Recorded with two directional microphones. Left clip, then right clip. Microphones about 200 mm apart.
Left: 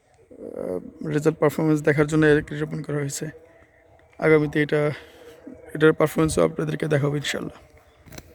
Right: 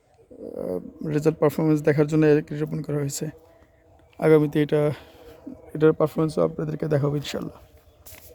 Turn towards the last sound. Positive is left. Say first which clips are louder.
# left 3 dB
turn(degrees=-10)  # may be behind; listen again after turning